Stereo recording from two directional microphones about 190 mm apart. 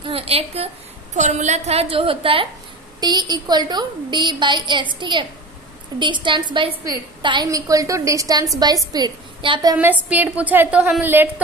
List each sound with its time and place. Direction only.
0.0 s a woman's voice: 30° right (ahead or behind); by 11.4 s 10° right (ahead or behind)